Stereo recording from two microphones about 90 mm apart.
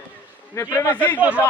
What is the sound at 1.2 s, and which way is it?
Speech, 15° right (ahead or behind).